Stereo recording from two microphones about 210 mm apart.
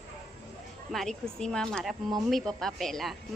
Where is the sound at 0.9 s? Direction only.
Centre (ahead or behind).